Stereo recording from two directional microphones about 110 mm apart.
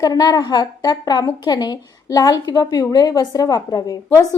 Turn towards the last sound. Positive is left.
turn(degrees=30)  # may be behind; listen again after turning